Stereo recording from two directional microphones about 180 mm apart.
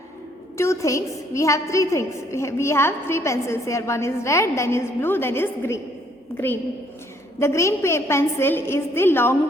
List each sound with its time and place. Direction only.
0.5 s a woman's voice: 15° left (ahead or behind)